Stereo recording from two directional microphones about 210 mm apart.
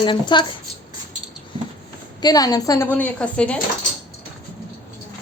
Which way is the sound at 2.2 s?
20° left (ahead or behind).